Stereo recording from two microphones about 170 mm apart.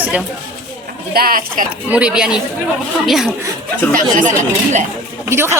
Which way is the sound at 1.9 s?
5° right (ahead or behind).